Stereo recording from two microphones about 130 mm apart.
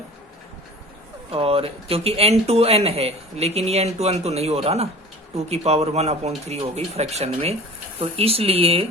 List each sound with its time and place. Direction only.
1.3 s speech: 45° right (ahead or behind)